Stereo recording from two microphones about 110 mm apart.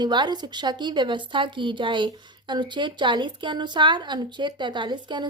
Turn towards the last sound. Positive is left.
turn(degrees=-45)  # may be behind; listen again after turning